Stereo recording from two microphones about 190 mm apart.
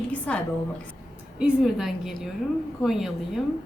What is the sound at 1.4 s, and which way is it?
Speech, 5° right (ahead or behind).